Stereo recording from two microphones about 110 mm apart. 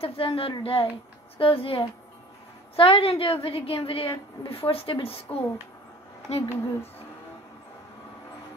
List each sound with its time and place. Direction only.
0.0 s a woman's voice: 60° left (ahead or behind)
6.3 s speech: 75° left (ahead or behind)